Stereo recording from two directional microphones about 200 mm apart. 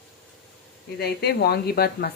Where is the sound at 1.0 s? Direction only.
55° left (ahead or behind).